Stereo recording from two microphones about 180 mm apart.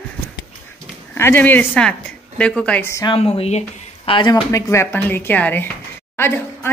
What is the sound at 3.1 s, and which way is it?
Speech, 35° left (ahead or behind).